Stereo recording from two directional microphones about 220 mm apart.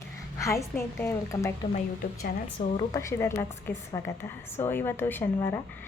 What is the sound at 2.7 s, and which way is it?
A woman's voice, 15° left (ahead or behind).